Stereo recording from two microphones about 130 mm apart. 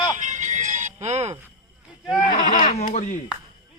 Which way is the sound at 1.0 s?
60° right (ahead or behind).